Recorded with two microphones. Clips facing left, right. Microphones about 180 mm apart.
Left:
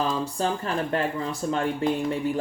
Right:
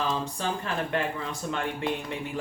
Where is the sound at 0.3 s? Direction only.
40° left (ahead or behind).